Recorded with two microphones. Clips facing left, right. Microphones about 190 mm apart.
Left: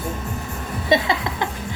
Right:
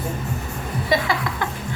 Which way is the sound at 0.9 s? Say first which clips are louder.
Left 3 dB; 20° left (ahead or behind).